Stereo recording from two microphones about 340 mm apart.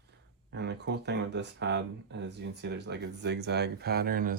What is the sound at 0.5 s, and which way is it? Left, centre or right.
Speech, right.